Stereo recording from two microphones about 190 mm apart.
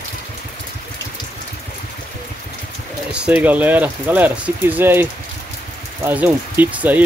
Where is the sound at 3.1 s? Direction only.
5° right (ahead or behind).